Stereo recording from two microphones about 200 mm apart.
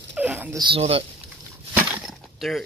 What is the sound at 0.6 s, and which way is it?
Speech, 25° right (ahead or behind).